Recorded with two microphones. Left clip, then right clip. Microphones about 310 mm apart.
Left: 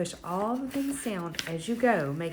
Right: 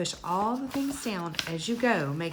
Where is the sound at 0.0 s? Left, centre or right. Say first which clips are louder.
Right 3 dB; centre.